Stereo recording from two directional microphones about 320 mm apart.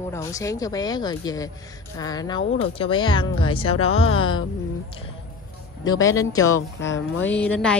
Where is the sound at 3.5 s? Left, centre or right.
Left.